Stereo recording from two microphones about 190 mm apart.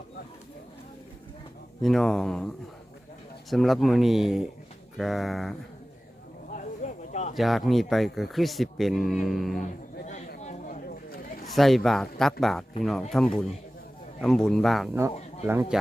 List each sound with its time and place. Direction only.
1.8 s speech: centre (ahead or behind)
3.5 s speech: centre (ahead or behind)
6.5 s a sound: 40° left (ahead or behind)
7.3 s speech: centre (ahead or behind)
9.6 s a sound: 40° left (ahead or behind)
11.4 s speech: centre (ahead or behind)
15.4 s speech: 10° right (ahead or behind)